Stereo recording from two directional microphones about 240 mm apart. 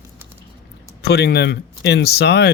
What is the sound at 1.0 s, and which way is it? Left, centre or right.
Speech, left.